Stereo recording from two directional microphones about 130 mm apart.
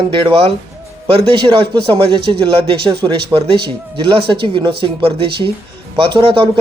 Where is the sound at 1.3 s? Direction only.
30° right (ahead or behind).